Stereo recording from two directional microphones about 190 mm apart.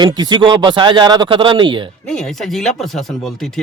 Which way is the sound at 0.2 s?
25° right (ahead or behind).